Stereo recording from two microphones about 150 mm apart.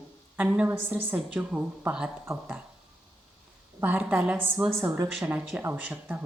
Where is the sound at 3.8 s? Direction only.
15° right (ahead or behind).